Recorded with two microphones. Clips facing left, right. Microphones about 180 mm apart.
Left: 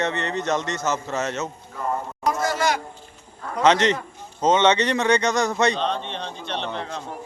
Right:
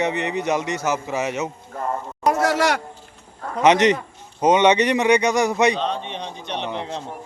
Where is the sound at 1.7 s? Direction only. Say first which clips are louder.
Right 1 dB; 50° right (ahead or behind).